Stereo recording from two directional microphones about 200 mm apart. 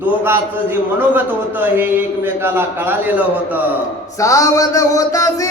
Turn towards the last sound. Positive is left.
turn(degrees=15)  # may be behind; listen again after turning